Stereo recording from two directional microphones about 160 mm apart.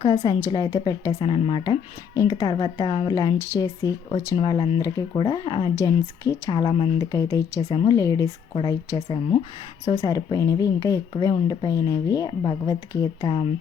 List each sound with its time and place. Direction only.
0.0 s speech: 35° left (ahead or behind)
7.1 s speech: 20° left (ahead or behind)
7.6 s speech: 35° left (ahead or behind)
7.9 s speech: 20° left (ahead or behind)
9.0 s speech: 30° left (ahead or behind)